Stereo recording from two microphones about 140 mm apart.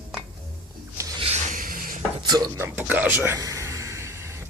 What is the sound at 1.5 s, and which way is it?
Rub, 80° right.